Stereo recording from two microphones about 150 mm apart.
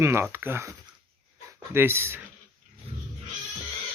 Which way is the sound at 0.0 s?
15° right (ahead or behind).